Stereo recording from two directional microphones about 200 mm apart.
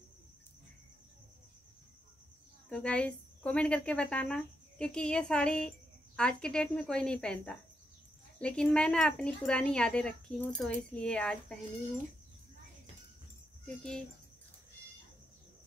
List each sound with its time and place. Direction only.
2.7 s speech: 5° left (ahead or behind)
13.7 s speech: 5° left (ahead or behind)